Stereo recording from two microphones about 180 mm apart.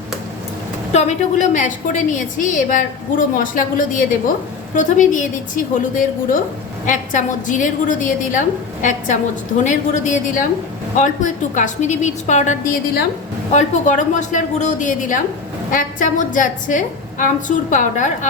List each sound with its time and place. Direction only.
0.9 s a woman's voice: 40° left (ahead or behind)